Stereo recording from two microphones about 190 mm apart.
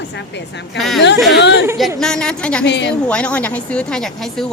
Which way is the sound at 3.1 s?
5° left (ahead or behind).